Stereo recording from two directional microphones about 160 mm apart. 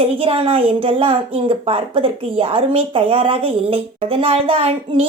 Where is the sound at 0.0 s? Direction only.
35° right (ahead or behind).